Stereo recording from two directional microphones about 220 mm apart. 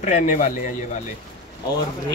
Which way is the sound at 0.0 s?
35° left (ahead or behind).